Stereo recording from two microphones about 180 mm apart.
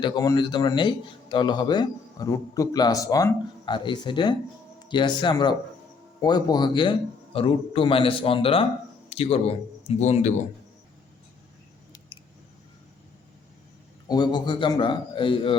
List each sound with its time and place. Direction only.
0.0 s speech: 20° left (ahead or behind); by 10.3 s 40° left (ahead or behind)
14.1 s speech: 25° left (ahead or behind)